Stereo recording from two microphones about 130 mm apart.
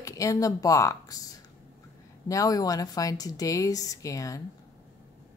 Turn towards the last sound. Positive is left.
turn(degrees=25)  # may be behind; listen again after turning